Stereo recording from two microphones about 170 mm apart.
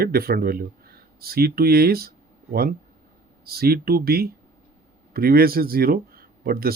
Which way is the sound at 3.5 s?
65° right (ahead or behind).